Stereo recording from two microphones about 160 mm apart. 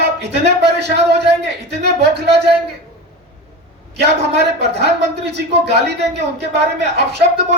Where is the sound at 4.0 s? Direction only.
90° right.